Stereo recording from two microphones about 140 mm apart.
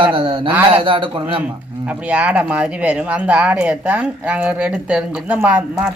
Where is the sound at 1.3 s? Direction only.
10° right (ahead or behind).